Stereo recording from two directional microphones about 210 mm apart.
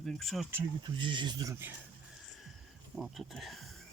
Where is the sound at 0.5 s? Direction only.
20° right (ahead or behind).